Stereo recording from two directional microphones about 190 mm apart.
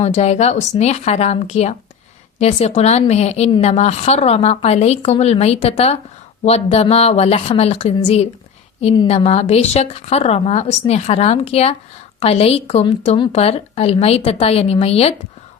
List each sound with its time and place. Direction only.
0.0 s a woman's voice: 35° left (ahead or behind)